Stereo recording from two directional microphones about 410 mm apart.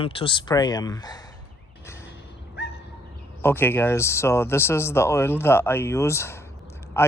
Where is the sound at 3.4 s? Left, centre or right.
Centre.